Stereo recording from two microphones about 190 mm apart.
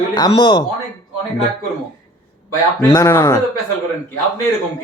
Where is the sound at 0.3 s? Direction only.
25° left (ahead or behind).